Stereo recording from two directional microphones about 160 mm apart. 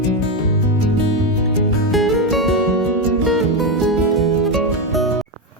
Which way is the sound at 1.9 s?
Centre (ahead or behind).